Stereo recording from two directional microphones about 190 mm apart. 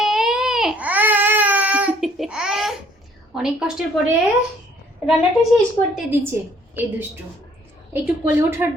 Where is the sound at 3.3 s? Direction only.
5° right (ahead or behind).